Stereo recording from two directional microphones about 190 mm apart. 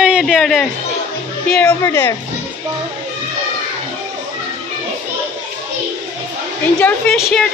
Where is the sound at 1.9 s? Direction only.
20° left (ahead or behind).